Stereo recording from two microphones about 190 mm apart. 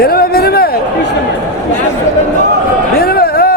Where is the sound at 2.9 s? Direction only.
55° left (ahead or behind).